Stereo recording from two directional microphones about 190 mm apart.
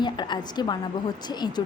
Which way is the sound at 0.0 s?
25° left (ahead or behind).